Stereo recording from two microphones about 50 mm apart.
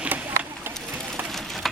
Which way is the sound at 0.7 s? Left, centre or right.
Right.